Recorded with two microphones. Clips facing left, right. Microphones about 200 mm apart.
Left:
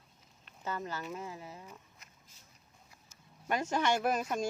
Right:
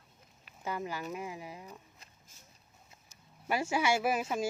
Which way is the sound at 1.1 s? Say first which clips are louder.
Right 2 dB; 15° right (ahead or behind).